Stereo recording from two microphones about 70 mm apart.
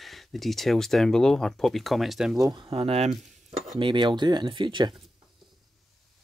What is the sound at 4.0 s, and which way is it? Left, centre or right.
Speech, right.